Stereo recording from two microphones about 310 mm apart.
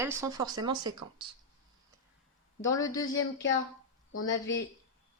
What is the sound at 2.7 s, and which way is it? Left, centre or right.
Speech, centre.